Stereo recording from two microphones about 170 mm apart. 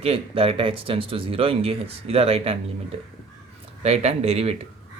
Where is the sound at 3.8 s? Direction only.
40° right (ahead or behind).